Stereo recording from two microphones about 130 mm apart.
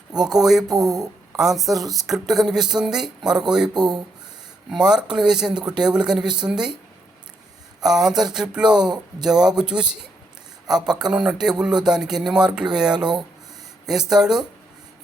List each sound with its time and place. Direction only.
0.1 s speech: 5° right (ahead or behind)
0.7 s speech: 30° right (ahead or behind)
1.4 s speech: centre (ahead or behind)
7.8 s speech: 5° right (ahead or behind)